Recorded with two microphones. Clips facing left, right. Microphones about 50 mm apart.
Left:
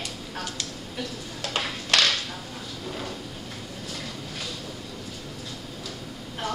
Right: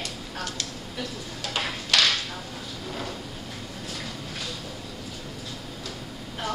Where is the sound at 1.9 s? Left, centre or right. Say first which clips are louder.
Even; left.